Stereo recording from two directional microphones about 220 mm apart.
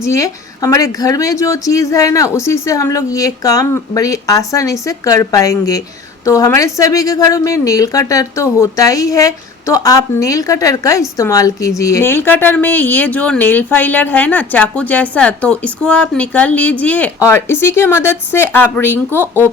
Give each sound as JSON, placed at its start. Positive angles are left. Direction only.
{"t": 0.0, "sound": "speech", "side_deg": 15}
{"t": 19.1, "sound": "speech", "side_deg": -10}